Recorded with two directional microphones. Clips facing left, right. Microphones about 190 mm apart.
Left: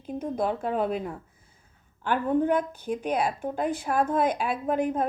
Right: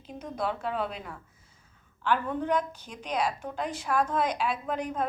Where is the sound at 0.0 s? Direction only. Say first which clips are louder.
Left 5 dB; 50° left (ahead or behind).